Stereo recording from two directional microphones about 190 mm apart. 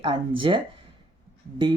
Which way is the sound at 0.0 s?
25° right (ahead or behind).